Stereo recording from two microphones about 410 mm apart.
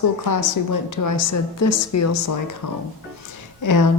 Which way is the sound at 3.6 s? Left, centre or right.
Left.